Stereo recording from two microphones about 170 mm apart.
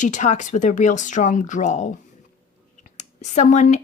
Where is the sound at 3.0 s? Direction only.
45° left (ahead or behind).